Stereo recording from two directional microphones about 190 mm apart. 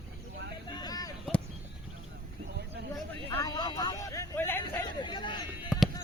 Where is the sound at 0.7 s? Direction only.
20° left (ahead or behind).